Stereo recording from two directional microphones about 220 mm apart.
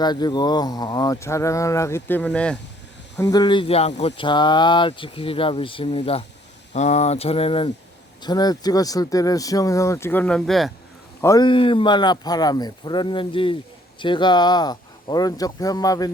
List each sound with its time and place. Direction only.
0.0 s speech: 20° left (ahead or behind)
3.2 s speech: 15° left (ahead or behind); by 10.7 s centre (ahead or behind)
11.2 s speech: 15° left (ahead or behind)